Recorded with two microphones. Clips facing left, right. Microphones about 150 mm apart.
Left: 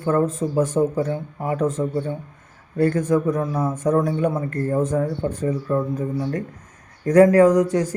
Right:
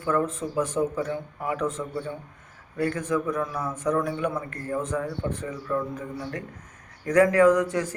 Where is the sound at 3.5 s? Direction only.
45° left (ahead or behind).